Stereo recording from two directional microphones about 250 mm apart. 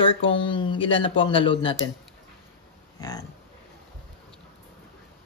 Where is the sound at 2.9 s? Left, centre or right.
Centre.